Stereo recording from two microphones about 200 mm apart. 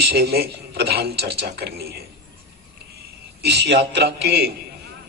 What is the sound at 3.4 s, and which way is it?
A man's voice, 55° right (ahead or behind).